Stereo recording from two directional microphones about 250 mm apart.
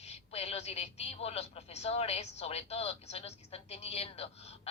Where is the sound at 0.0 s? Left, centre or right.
Left.